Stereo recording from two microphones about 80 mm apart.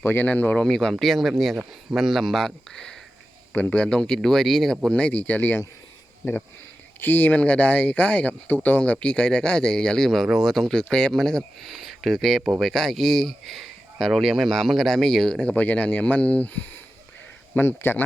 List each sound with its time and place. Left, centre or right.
0.0 s speech: left
0.6 s speech: centre
3.5 s speech: centre
4.9 s speech: centre
7.0 s speech: left
17.5 s speech: left